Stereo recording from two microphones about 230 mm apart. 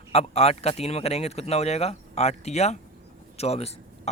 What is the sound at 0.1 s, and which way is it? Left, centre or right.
Speech, left.